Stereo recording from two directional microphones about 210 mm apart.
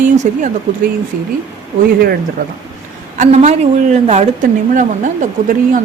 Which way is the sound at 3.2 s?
35° right (ahead or behind).